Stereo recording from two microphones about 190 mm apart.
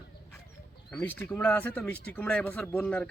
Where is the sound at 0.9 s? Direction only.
5° left (ahead or behind).